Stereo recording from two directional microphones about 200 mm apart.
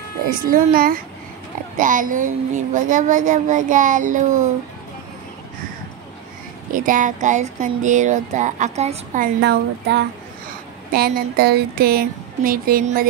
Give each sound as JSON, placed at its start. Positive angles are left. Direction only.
{"t": 0.3, "sound": "speech", "side_deg": -45}
{"t": 6.7, "sound": "speech", "side_deg": -40}
{"t": 9.4, "sound": "speech", "side_deg": -60}